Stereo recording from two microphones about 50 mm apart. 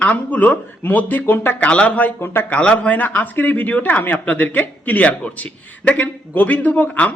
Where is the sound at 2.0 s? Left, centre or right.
Left.